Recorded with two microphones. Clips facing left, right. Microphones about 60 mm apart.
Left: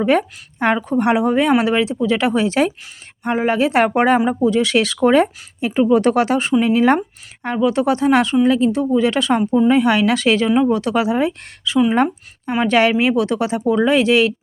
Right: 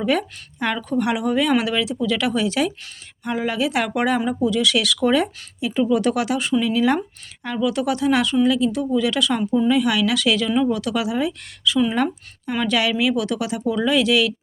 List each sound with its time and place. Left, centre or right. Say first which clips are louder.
0.0 s speech: left 5 dB; left